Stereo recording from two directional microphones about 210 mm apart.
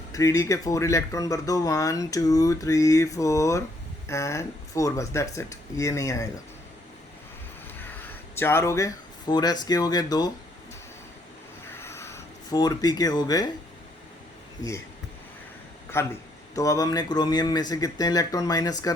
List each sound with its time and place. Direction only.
0.1 s speech: 15° left (ahead or behind)
8.4 s speech: 10° left (ahead or behind)
11.7 s a sound: 10° left (ahead or behind)
15.9 s speech: 10° left (ahead or behind)